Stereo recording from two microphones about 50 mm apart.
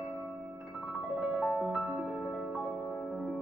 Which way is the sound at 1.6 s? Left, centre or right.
Centre.